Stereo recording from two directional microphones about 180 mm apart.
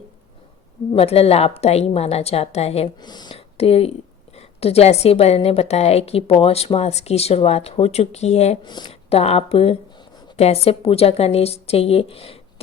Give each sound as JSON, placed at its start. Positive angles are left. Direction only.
{"t": 0.9, "sound": "a woman's voice", "side_deg": 35}
{"t": 8.6, "sound": "a woman's voice", "side_deg": 25}